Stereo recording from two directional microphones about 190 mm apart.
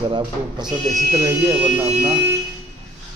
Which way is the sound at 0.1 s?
25° right (ahead or behind).